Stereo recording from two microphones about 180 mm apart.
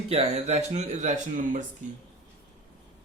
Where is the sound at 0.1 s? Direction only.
35° right (ahead or behind).